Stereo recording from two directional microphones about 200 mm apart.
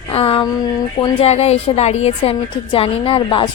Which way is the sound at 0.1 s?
30° left (ahead or behind).